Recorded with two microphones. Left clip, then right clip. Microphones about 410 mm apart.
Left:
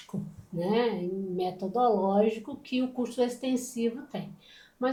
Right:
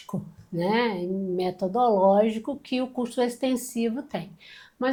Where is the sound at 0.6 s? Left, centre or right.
Right.